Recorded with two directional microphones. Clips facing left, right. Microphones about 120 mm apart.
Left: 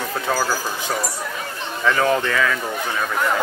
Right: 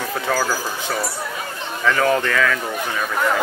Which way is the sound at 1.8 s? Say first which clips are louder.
Right 1 dB; 15° left (ahead or behind).